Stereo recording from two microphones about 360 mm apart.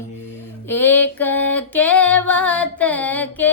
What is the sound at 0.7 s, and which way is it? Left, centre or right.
Music, centre.